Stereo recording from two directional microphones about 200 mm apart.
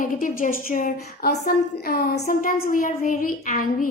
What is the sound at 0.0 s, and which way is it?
A woman's voice, 40° left (ahead or behind).